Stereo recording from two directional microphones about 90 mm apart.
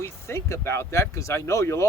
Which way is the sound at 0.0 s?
30° left (ahead or behind).